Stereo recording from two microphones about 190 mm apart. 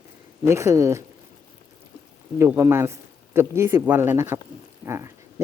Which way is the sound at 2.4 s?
15° right (ahead or behind).